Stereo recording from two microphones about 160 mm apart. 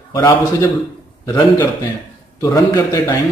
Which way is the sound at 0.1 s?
20° left (ahead or behind).